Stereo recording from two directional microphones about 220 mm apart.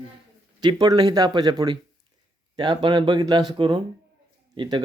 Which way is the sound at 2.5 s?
20° right (ahead or behind).